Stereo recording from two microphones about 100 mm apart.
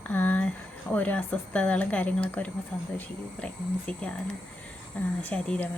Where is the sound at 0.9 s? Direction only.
15° left (ahead or behind).